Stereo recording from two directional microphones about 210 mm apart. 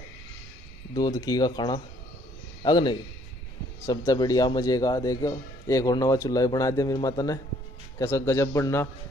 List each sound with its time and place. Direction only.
0.9 s a man's voice: 20° left (ahead or behind)